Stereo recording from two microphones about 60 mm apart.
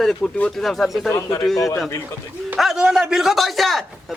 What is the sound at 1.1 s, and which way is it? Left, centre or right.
Speech, left.